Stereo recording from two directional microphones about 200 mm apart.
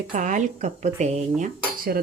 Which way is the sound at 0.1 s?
40° right (ahead or behind).